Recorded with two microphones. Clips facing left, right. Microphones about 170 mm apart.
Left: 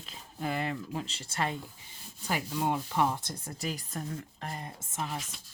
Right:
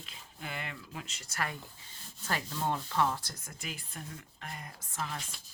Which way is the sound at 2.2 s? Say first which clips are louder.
Left 3 dB; 15° left (ahead or behind).